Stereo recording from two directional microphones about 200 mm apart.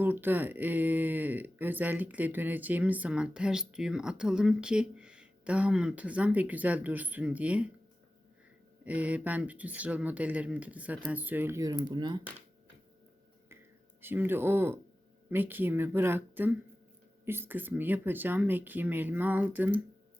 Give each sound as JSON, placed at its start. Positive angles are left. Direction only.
{"t": 0.0, "sound": "speech", "side_deg": -10}
{"t": 8.8, "sound": "speech", "side_deg": -5}
{"t": 14.0, "sound": "speech", "side_deg": -10}